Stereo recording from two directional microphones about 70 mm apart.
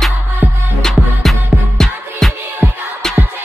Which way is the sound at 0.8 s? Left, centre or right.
Centre.